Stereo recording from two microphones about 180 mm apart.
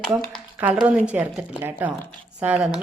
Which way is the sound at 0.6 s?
5° right (ahead or behind).